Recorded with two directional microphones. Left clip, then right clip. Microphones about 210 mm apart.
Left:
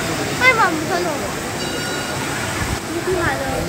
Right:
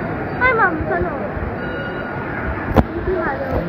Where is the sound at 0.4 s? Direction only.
90° left.